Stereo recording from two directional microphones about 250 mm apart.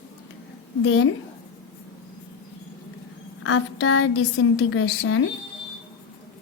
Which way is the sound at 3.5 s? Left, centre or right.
Left.